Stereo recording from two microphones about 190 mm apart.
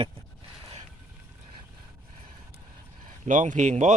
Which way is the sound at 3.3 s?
40° right (ahead or behind).